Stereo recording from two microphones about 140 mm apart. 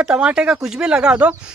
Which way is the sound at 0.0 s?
10° right (ahead or behind).